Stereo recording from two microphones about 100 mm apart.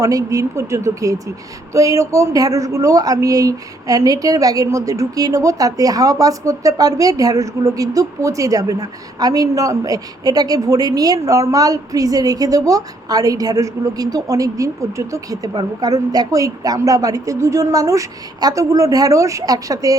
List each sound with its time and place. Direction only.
0.0 s speech: 35° right (ahead or behind)